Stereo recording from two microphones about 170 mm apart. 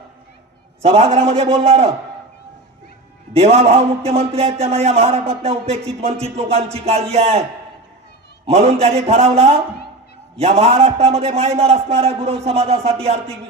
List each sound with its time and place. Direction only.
0.8 s a man's voice: 40° right (ahead or behind)
3.3 s a man's voice: 40° right (ahead or behind)
8.4 s a man's voice: 40° right (ahead or behind)